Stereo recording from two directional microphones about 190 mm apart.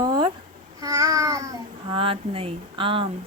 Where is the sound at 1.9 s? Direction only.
30° right (ahead or behind).